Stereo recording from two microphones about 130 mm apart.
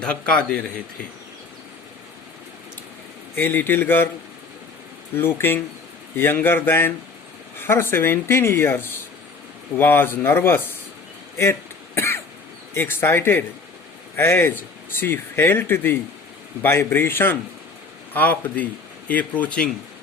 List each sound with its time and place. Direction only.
0.0 s speech: 5° left (ahead or behind)
3.3 s speech: 15° left (ahead or behind)
5.1 s speech: 15° left (ahead or behind)
11.9 s cough: 20° left (ahead or behind)
12.7 s a man's voice: 15° left (ahead or behind)